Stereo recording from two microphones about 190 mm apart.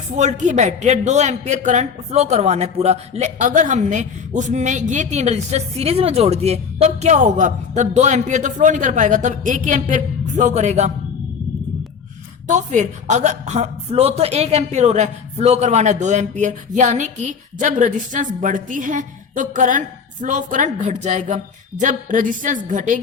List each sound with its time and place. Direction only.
0.2 s a man's voice: 40° right (ahead or behind)
12.5 s a man's voice: 40° right (ahead or behind)